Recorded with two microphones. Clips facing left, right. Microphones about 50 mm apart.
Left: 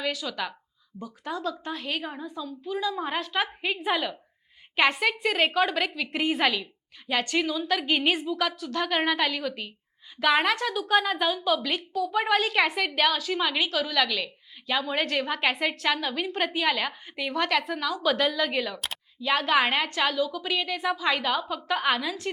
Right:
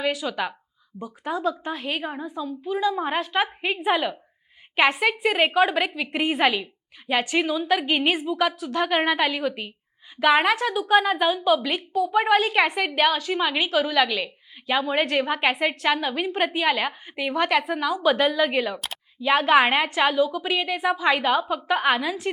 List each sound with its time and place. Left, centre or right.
0.0 s a woman's voice: centre